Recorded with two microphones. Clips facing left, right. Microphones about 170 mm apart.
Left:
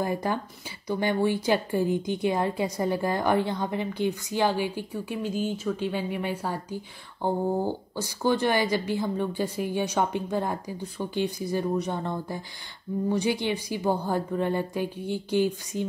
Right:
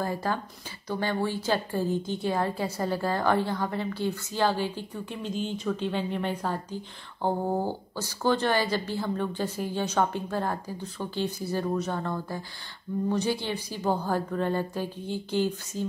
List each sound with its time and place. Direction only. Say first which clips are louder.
0.0 s a woman's voice: left 2 dB; 15° left (ahead or behind)